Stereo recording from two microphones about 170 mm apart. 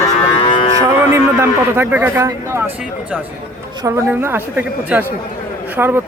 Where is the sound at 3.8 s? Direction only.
15° right (ahead or behind).